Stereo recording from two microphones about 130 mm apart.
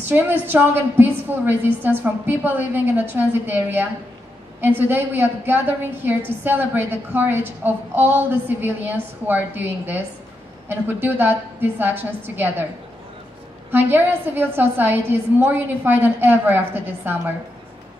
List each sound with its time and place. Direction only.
0.1 s a woman's voice: 15° right (ahead or behind)
13.7 s a woman's voice: 15° right (ahead or behind)